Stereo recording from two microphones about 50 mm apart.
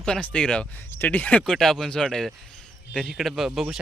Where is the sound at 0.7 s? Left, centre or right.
Left.